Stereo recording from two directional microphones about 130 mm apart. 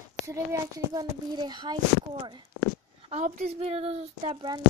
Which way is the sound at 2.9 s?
55° right (ahead or behind).